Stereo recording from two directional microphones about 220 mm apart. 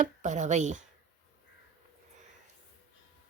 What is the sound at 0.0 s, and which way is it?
Speech, 35° right (ahead or behind).